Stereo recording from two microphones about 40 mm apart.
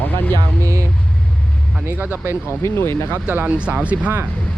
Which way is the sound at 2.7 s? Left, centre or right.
Left.